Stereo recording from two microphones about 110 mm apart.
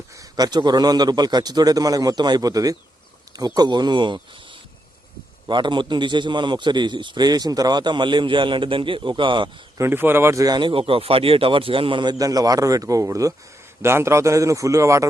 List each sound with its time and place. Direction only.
0.1 s a man's voice: 35° right (ahead or behind)
5.5 s a man's voice: 45° right (ahead or behind)
9.7 s a man's voice: 20° right (ahead or behind); by 12.1 s 50° right (ahead or behind)
12.1 s a man's voice: 35° right (ahead or behind)